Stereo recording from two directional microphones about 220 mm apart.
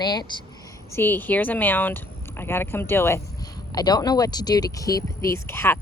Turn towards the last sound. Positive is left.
turn(degrees=10)  # may be behind; listen again after turning